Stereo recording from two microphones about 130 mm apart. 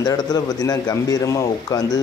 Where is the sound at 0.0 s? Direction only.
30° left (ahead or behind).